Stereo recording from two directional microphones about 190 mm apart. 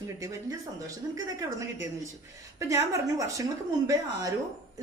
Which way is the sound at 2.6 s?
15° right (ahead or behind).